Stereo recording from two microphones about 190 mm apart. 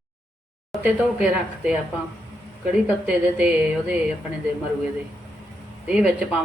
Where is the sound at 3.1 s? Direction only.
5° right (ahead or behind).